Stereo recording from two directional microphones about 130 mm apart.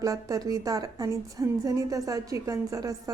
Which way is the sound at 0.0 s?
25° right (ahead or behind).